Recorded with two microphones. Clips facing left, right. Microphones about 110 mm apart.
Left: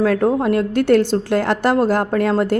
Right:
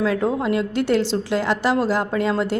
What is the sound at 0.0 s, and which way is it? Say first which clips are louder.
Speech: left 5 dB; 50° left (ahead or behind).